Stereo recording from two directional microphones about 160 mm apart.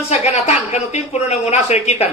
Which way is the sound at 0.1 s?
45° left (ahead or behind).